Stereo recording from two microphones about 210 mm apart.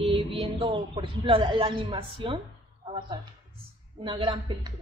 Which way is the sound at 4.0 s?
25° right (ahead or behind).